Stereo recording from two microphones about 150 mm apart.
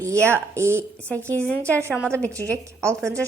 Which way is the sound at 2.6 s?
20° right (ahead or behind).